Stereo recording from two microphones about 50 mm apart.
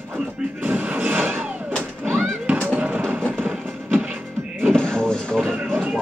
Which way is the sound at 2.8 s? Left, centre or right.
Right.